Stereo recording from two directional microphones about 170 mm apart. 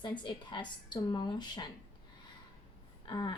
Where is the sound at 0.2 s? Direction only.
30° left (ahead or behind).